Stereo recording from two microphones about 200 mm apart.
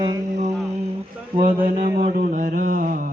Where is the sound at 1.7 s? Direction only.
50° right (ahead or behind).